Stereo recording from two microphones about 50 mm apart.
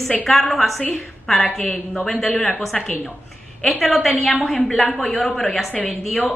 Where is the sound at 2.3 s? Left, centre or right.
Centre.